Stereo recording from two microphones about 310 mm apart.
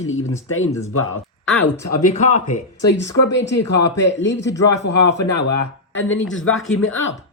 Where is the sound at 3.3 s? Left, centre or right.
Left.